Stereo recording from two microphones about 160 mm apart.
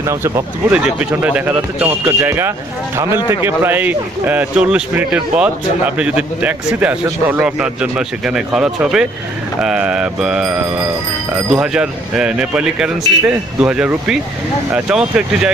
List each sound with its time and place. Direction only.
0.0 s a man's voice: 20° right (ahead or behind)